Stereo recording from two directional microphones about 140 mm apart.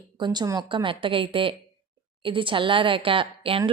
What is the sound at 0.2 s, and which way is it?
A woman's voice, 30° right (ahead or behind).